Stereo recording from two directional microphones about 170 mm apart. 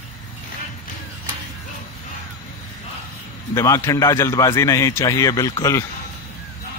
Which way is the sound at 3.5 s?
20° left (ahead or behind).